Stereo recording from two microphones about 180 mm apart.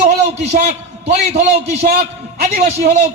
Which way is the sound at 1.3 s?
35° right (ahead or behind).